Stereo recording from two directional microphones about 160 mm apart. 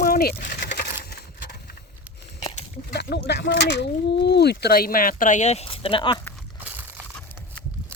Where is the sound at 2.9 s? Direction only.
90° left; by 6.2 s 30° left (ahead or behind).